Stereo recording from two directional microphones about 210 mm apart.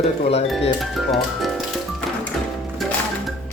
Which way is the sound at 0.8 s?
Centre (ahead or behind).